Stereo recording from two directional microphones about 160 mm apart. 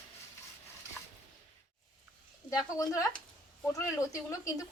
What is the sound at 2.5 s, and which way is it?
Speech, 20° left (ahead or behind).